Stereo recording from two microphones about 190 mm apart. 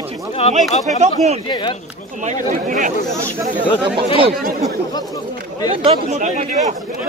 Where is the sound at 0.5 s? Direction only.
40° right (ahead or behind).